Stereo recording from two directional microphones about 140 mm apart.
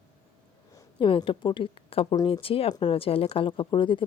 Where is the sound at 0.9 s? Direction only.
40° left (ahead or behind).